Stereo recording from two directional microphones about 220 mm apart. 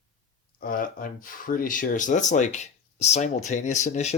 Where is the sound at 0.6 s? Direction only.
40° left (ahead or behind).